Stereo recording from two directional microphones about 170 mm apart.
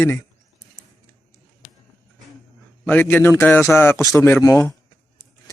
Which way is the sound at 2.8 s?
10° left (ahead or behind).